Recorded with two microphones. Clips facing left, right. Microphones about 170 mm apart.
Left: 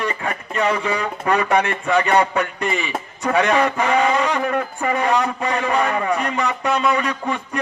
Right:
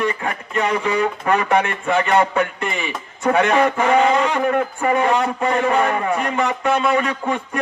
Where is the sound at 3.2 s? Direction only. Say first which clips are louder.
Right 2 dB; 50° right (ahead or behind).